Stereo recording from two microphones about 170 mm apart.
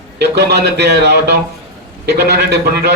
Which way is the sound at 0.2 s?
80° right.